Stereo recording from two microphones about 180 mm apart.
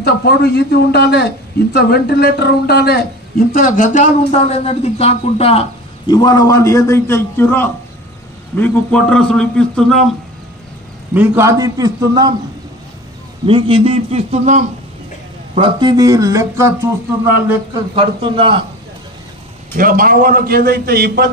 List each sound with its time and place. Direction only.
0.0 s a man's voice: 65° left (ahead or behind); by 10.0 s 5° left (ahead or behind)
11.1 s speech: 15° right (ahead or behind)
13.5 s a man's voice: 30° right (ahead or behind)
15.5 s speech: 25° right (ahead or behind)
17.9 s speech: 30° right (ahead or behind)
19.8 s a man's voice: 50° right (ahead or behind)